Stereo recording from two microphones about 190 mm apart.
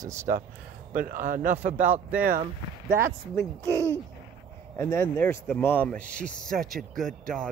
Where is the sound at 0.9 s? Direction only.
45° right (ahead or behind).